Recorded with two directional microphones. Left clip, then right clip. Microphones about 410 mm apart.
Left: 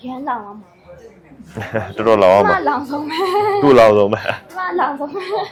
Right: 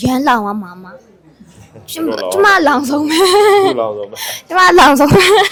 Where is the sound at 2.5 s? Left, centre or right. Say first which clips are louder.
Right 6 dB; right.